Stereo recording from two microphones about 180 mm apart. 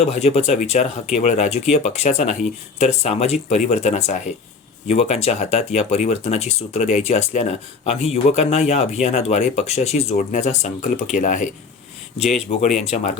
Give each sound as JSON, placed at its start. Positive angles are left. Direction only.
{"t": 0.0, "sound": "speech", "side_deg": 35}